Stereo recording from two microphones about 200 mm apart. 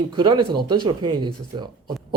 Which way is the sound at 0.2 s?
25° right (ahead or behind).